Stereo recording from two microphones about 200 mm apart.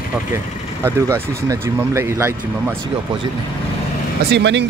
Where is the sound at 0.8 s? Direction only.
15° right (ahead or behind).